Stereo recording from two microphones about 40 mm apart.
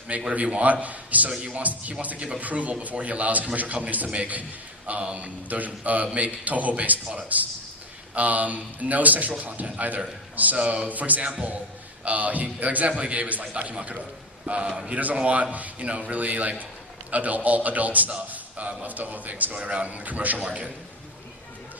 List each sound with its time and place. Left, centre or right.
0.3 s a man's voice: right
19.5 s a man's voice: right
20.4 s a man's voice: right